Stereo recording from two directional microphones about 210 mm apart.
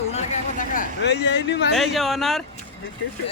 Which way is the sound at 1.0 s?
55° left (ahead or behind).